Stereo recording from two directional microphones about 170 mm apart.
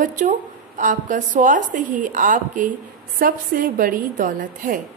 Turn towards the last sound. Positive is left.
turn(degrees=-50)  # may be behind; listen again after turning